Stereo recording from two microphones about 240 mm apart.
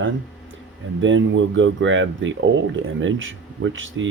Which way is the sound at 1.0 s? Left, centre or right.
Right.